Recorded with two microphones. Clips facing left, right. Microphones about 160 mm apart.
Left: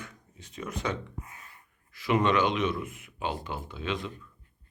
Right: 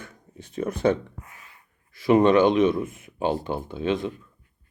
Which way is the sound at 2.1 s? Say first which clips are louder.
Right 8 dB; 45° right (ahead or behind).